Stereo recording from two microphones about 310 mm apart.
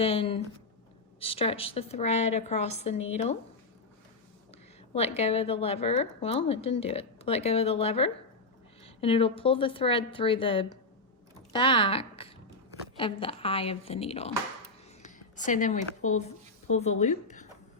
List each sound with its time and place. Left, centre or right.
0.0 s a woman's voice: centre
4.9 s a woman's voice: centre